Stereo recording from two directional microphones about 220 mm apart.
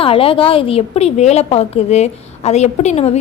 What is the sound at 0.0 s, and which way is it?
A woman's voice, 25° left (ahead or behind).